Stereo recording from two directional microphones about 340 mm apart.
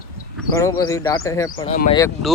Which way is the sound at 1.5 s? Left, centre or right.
Left.